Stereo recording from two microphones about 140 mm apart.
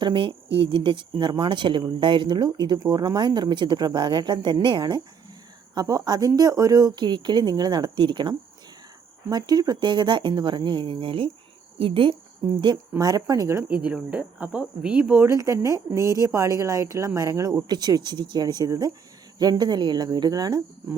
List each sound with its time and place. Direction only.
0.0 s speech: 35° right (ahead or behind)
13.0 s speech: 30° right (ahead or behind)
13.7 s speech: 10° right (ahead or behind)
15.4 s speech: 25° right (ahead or behind)